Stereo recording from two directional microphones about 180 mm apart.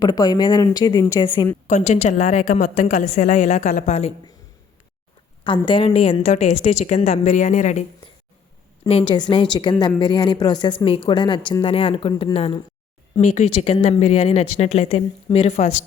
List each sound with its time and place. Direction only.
0.0 s speech: 20° left (ahead or behind)
1.6 s a woman's voice: 40° left (ahead or behind)
5.4 s a woman's voice: 25° left (ahead or behind)